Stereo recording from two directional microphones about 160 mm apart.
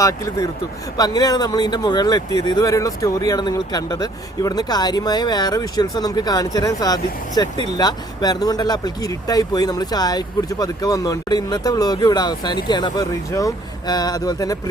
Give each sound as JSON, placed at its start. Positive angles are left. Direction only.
{"t": 0.0, "sound": "speech", "side_deg": 20}